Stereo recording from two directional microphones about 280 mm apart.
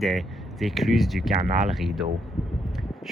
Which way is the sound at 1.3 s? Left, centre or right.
Right.